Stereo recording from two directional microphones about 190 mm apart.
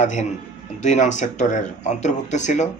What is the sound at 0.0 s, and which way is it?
Speech, 40° left (ahead or behind).